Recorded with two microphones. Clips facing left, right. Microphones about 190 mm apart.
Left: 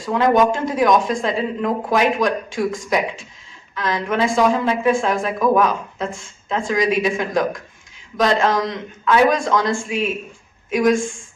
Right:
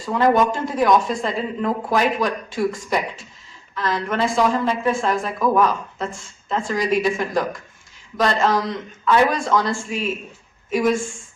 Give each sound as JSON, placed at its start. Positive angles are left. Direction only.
{"t": 0.0, "sound": "speech", "side_deg": 0}